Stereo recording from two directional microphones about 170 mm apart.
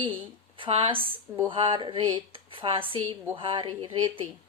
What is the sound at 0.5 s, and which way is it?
A woman's voice, 35° right (ahead or behind).